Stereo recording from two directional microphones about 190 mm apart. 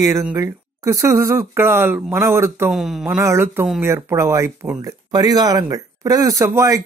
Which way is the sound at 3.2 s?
15° right (ahead or behind).